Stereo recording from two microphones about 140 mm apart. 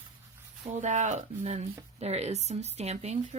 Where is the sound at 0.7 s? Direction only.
60° right (ahead or behind).